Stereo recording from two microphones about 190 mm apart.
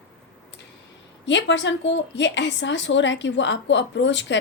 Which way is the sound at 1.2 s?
70° left (ahead or behind).